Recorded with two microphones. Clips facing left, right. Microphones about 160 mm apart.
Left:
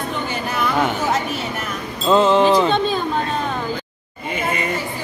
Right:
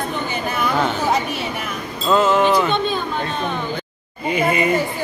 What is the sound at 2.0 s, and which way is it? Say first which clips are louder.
Speech: left 2 dB; 25° left (ahead or behind).